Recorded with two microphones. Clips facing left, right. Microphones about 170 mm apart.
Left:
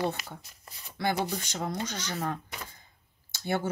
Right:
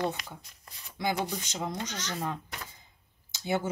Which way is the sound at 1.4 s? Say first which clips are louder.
Left 2 dB; 15° right (ahead or behind).